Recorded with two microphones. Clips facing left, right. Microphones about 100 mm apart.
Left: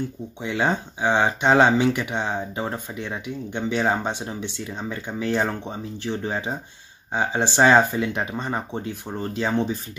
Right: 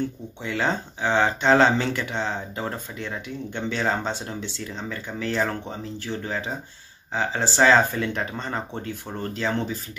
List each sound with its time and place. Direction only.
0.4 s speech: 15° left (ahead or behind)